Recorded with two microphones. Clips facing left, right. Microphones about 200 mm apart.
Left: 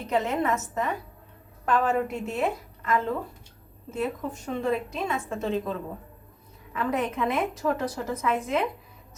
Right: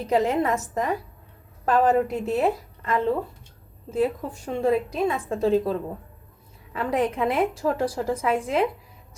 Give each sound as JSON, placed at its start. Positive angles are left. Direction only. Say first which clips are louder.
{"t": 0.1, "sound": "a woman's voice", "louder": "right 4 dB", "side_deg": -35}
{"t": 6.7, "sound": "a woman's voice", "louder": "right 3 dB", "side_deg": -30}